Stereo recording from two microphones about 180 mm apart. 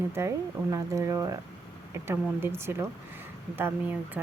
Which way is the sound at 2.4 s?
15° right (ahead or behind).